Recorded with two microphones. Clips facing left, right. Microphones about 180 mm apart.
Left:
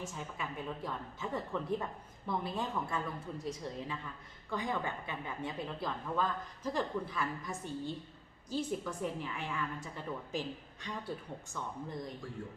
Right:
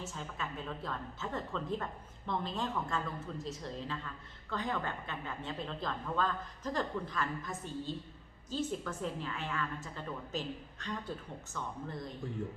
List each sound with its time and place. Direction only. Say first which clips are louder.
0.0 s a woman's voice: even; 15° left (ahead or behind)